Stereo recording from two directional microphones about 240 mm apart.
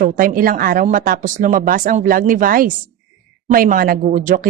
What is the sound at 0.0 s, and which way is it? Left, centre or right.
A woman's voice, right.